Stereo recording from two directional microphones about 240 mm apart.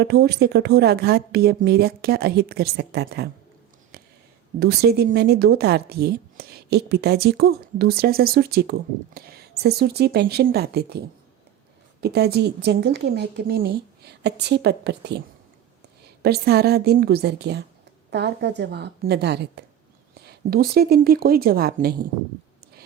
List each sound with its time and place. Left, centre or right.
0.0 s speech: right
3.9 s a sound: right
4.6 s a woman's voice: right
16.2 s a woman's voice: right